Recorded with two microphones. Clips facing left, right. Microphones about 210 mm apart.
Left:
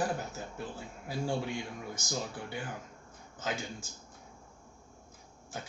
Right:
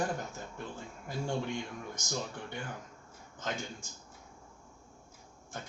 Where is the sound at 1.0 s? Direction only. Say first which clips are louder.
Left 1 dB; 5° left (ahead or behind).